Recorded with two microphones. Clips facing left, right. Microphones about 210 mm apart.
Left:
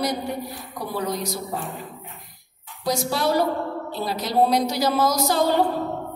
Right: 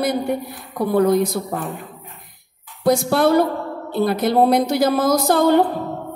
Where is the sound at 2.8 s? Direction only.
55° right (ahead or behind).